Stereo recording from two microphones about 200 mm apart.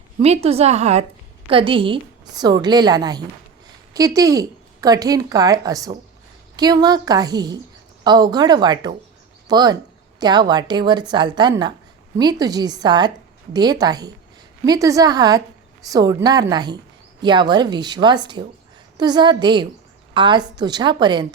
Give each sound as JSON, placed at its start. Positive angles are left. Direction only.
{"t": 0.2, "sound": "a woman's voice", "side_deg": -30}